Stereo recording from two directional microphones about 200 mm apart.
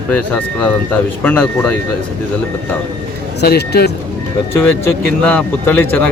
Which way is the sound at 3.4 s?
55° left (ahead or behind).